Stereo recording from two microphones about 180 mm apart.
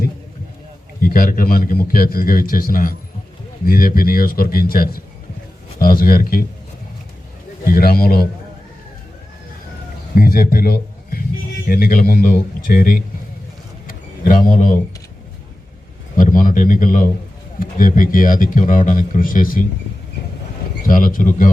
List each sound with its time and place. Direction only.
1.0 s a man's voice: 50° left (ahead or behind)
7.6 s a man's voice: 55° left (ahead or behind)
10.2 s a man's voice: 55° left (ahead or behind)
13.8 s a sound: 50° left (ahead or behind)
16.1 s speech: 50° left (ahead or behind)
20.8 s speech: 50° left (ahead or behind)